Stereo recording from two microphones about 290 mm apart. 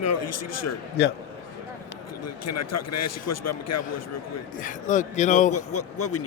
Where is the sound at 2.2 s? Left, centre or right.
Left.